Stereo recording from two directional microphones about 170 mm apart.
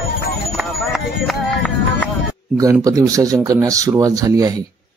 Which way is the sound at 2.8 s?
20° right (ahead or behind).